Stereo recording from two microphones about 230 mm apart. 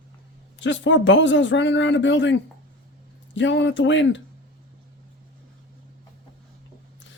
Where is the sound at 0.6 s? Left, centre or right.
Left.